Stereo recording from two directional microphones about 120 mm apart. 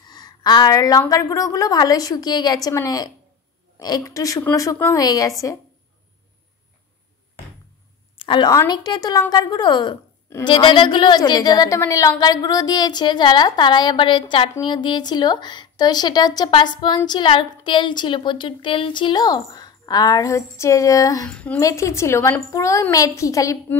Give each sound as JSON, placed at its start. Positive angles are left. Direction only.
{"t": 0.0, "sound": "speech", "side_deg": 35}
{"t": 3.8, "sound": "a woman's voice", "side_deg": 30}
{"t": 8.2, "sound": "a sound", "side_deg": 45}
{"t": 8.5, "sound": "speech", "side_deg": 30}
{"t": 21.3, "sound": "a woman's voice", "side_deg": 10}
{"t": 21.5, "sound": "a woman's voice", "side_deg": 25}